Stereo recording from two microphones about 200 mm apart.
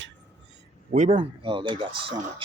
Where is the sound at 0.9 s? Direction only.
40° right (ahead or behind).